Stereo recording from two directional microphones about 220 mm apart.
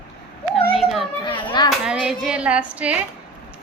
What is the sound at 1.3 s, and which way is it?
Speech, 20° left (ahead or behind).